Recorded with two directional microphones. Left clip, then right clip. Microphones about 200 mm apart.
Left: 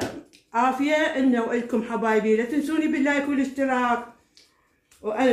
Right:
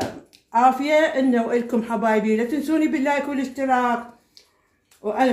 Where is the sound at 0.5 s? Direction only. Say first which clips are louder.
Right 5 dB; 60° right (ahead or behind).